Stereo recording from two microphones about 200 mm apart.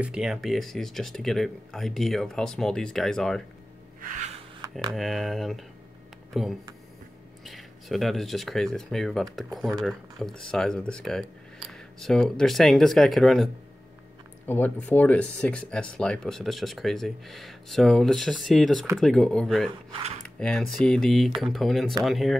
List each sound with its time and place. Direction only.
0.0 s speech: 5° right (ahead or behind)
4.9 s speech: centre (ahead or behind)